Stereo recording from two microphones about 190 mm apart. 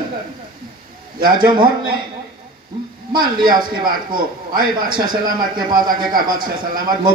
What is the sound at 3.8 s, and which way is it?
Speech, 50° right (ahead or behind).